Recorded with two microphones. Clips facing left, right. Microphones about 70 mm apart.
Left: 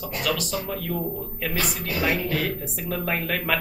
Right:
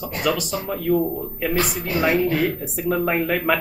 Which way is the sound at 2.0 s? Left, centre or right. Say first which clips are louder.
Right 6 dB; centre.